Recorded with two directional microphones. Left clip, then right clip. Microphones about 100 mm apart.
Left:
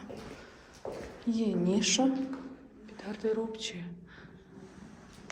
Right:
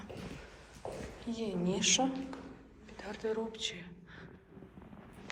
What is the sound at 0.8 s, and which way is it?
Speech, 50° right (ahead or behind).